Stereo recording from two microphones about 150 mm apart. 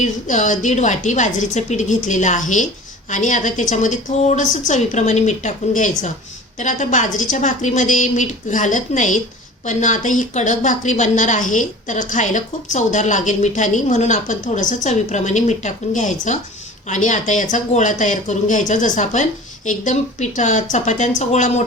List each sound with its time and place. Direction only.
0.0 s a woman's voice: 55° left (ahead or behind)